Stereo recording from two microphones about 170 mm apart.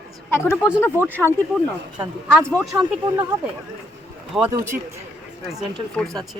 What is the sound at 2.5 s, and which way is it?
Speech, centre (ahead or behind).